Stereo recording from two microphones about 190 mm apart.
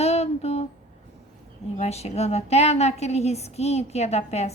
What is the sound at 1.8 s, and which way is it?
A woman's voice, 35° left (ahead or behind).